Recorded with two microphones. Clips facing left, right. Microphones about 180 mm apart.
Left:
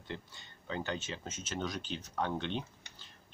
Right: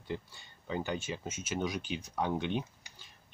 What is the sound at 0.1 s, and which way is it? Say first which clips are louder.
Speech: right 5 dB; 10° right (ahead or behind).